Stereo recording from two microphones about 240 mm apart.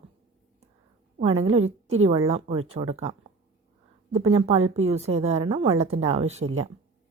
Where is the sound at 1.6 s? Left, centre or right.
Right.